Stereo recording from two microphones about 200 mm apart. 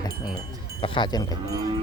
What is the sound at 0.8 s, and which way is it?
Speech, 25° left (ahead or behind).